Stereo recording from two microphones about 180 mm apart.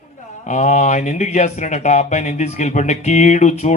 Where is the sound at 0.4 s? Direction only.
40° left (ahead or behind).